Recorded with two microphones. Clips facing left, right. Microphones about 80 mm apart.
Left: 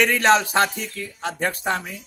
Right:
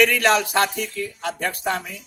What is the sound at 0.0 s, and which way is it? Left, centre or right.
A man's voice, left.